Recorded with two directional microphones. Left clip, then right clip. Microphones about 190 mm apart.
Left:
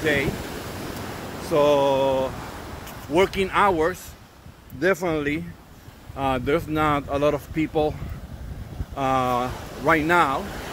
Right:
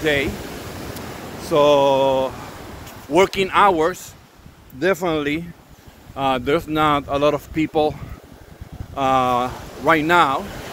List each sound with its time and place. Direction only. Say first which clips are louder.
0.0 s speech: right 3 dB; 30° right (ahead or behind)
1.5 s speech: right 4 dB; 25° right (ahead or behind)
4.7 s speech: right 3 dB; 15° right (ahead or behind); by 7.9 s 30° right (ahead or behind)
8.9 s speech: right 5 dB; 25° right (ahead or behind)